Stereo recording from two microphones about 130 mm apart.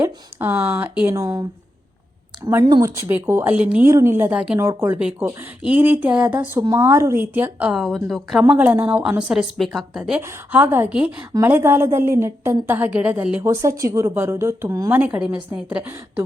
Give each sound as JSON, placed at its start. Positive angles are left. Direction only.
{"t": 0.0, "sound": "a woman's voice", "side_deg": -15}
{"t": 8.4, "sound": "a woman's voice", "side_deg": -15}
{"t": 13.4, "sound": "a woman's voice", "side_deg": -25}